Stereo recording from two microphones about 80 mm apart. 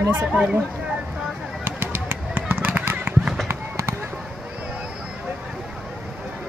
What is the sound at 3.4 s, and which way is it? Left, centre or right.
Fireworks, right.